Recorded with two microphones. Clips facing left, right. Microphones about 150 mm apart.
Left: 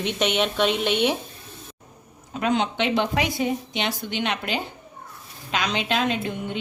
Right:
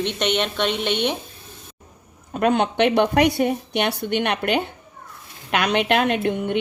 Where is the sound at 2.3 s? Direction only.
55° right (ahead or behind).